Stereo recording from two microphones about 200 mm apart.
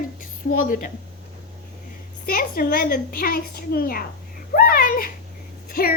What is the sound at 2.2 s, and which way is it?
A woman's voice, 45° left (ahead or behind).